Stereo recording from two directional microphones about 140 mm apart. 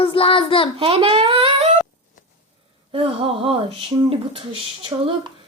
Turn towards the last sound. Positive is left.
turn(degrees=-40)  # may be behind; listen again after turning